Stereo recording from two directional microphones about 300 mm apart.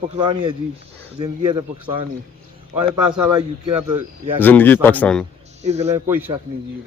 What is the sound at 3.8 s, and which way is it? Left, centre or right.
Speech, centre.